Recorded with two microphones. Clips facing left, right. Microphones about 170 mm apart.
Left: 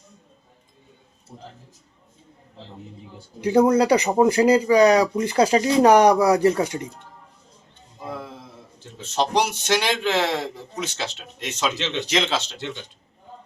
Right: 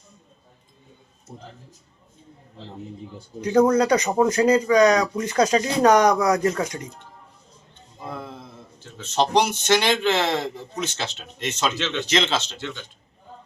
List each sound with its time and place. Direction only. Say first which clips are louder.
3.4 s a man's voice: left 1 dB; 10° left (ahead or behind)
4.8 s speech: left 2 dB; 30° left (ahead or behind)
5.4 s a man's voice: left 2 dB; 10° left (ahead or behind)
6.1 s speech: left 3 dB; 30° left (ahead or behind)
8.0 s a sound: left 1 dB; 10° left (ahead or behind)
9.0 s a man's voice: right 2 dB; 10° left (ahead or behind)